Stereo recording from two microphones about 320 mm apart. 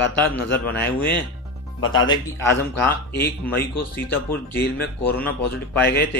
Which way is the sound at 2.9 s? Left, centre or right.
Left.